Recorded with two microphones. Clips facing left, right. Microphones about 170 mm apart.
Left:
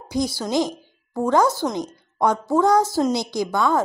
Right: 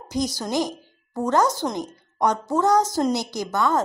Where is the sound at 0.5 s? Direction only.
10° right (ahead or behind).